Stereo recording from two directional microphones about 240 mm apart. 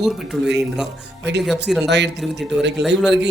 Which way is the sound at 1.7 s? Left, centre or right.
Centre.